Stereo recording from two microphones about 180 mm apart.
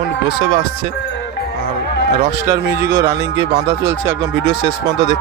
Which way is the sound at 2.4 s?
15° right (ahead or behind).